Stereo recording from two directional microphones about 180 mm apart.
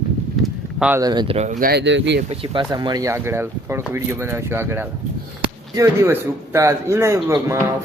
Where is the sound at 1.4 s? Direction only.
45° right (ahead or behind).